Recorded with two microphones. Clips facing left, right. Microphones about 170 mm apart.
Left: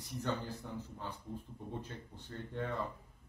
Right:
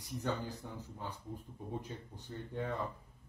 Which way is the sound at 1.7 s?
10° right (ahead or behind).